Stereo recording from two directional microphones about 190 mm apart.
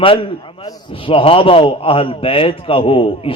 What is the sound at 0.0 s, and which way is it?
A man's voice, 30° left (ahead or behind).